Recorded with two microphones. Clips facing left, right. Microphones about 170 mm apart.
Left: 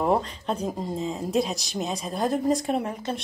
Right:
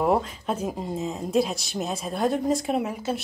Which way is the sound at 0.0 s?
5° right (ahead or behind).